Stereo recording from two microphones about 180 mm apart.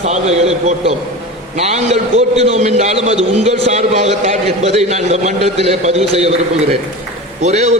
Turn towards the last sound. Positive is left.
turn(degrees=-40)  # may be behind; listen again after turning